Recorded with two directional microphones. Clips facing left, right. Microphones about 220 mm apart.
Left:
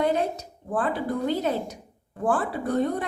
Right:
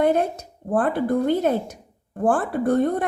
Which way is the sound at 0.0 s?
55° right (ahead or behind).